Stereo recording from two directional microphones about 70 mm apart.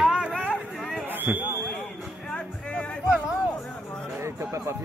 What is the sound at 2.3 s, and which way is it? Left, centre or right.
Music, centre.